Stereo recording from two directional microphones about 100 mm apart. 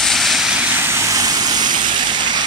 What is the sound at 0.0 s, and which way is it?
Vehicle, centre (ahead or behind).